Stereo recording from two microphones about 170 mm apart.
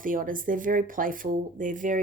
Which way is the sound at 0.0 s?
55° right (ahead or behind).